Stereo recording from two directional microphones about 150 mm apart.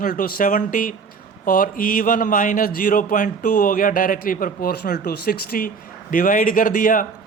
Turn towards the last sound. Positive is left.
turn(degrees=65)  # may be behind; listen again after turning